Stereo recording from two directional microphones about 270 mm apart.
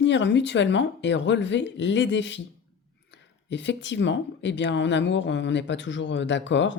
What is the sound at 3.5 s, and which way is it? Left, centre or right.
Speech, left.